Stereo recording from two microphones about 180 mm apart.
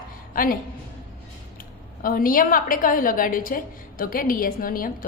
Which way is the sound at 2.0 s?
50° left (ahead or behind).